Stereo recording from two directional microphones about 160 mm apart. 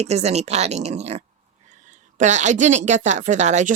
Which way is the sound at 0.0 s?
40° right (ahead or behind).